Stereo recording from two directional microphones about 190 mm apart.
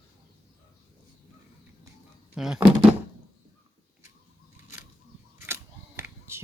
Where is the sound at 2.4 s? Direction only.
5° right (ahead or behind).